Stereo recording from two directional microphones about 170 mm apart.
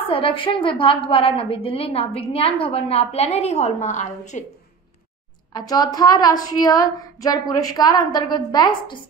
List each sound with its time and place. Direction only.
0.1 s a woman's voice: 30° left (ahead or behind)
5.5 s a woman's voice: 25° left (ahead or behind)